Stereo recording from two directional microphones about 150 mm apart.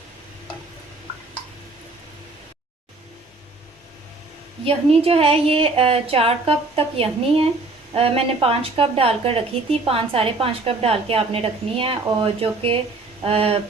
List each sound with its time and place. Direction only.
4.6 s a woman's voice: 40° right (ahead or behind)